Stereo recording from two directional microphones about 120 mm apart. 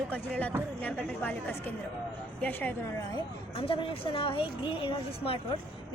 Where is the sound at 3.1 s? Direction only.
50° left (ahead or behind).